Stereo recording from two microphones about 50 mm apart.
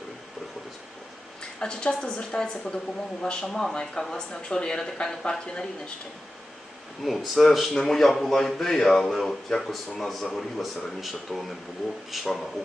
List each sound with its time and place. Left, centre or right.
1.4 s speech: centre
7.0 s a man's voice: centre